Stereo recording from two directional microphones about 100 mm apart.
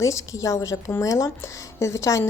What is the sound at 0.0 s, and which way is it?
A woman's voice, 30° left (ahead or behind).